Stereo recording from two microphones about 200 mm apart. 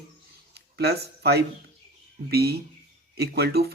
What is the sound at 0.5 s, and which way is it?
Speech, 55° right (ahead or behind).